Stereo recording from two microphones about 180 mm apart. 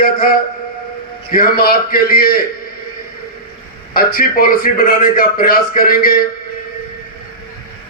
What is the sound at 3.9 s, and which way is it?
A man's voice, 55° left (ahead or behind).